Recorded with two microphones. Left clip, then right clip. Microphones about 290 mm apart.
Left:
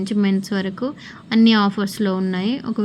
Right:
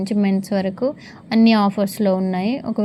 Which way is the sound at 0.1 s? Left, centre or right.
Right.